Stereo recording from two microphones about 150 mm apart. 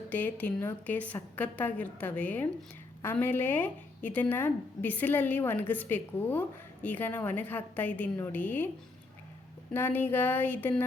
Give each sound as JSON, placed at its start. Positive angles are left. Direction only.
{"t": 0.1, "sound": "a woman's voice", "side_deg": 10}
{"t": 9.7, "sound": "a woman's voice", "side_deg": 15}